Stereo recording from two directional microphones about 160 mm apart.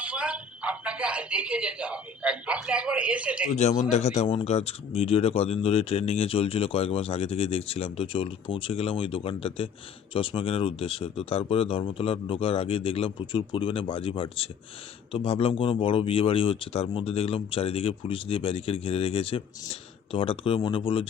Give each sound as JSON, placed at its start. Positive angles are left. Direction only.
{"t": 0.0, "sound": "speech", "side_deg": -5}
{"t": 3.5, "sound": "speech", "side_deg": 45}